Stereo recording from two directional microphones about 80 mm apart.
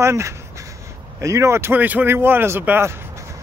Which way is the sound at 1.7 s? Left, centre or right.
Right.